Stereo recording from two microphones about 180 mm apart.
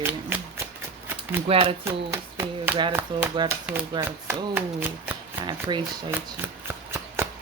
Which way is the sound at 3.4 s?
10° right (ahead or behind).